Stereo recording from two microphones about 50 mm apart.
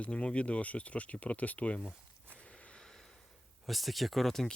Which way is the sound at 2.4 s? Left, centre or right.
Left.